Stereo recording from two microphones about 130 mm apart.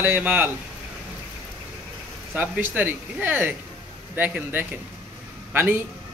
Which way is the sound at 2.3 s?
15° right (ahead or behind).